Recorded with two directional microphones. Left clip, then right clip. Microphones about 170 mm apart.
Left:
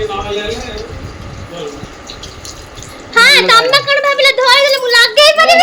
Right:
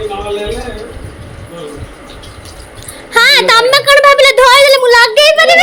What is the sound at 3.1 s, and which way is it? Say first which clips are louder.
A woman's voice: even; 30° right (ahead or behind).